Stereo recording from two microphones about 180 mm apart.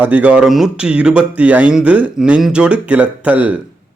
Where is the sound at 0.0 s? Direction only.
10° right (ahead or behind).